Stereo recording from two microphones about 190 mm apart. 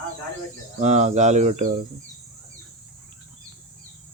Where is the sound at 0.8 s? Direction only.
35° right (ahead or behind).